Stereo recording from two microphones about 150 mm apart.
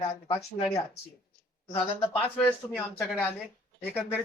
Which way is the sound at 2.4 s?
10° left (ahead or behind).